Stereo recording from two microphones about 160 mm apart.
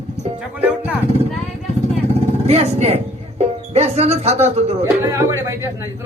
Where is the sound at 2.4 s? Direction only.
40° right (ahead or behind).